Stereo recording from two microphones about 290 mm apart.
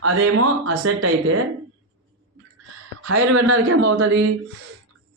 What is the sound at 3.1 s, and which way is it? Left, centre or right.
A man's voice, right.